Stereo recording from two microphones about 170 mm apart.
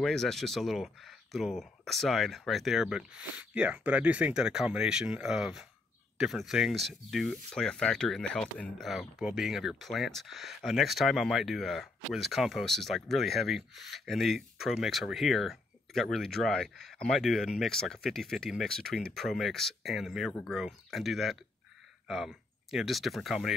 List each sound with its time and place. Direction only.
0.0 s speech: 5° left (ahead or behind)